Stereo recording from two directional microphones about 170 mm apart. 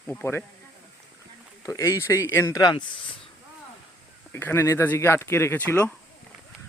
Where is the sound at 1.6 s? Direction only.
20° left (ahead or behind).